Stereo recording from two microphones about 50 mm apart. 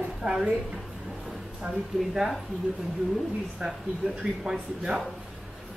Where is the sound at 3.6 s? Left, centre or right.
Centre.